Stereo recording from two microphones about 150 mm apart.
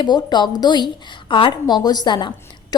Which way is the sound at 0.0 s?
30° left (ahead or behind).